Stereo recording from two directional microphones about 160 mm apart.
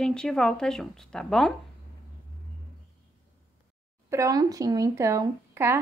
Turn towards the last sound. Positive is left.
turn(degrees=-15)  # may be behind; listen again after turning